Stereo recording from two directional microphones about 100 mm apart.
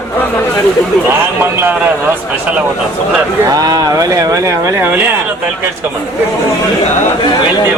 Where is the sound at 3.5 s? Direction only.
40° right (ahead or behind).